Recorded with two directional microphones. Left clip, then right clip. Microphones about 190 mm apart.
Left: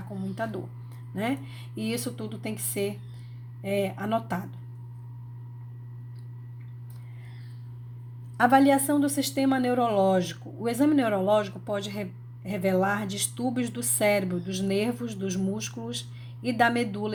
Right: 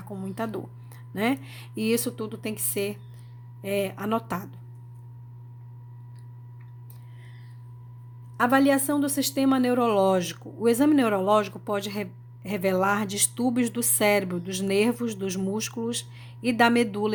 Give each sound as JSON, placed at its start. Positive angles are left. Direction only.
{"t": 0.1, "sound": "a sound", "side_deg": -35}
{"t": 1.1, "sound": "a woman's voice", "side_deg": -35}
{"t": 8.4, "sound": "a woman's voice", "side_deg": -20}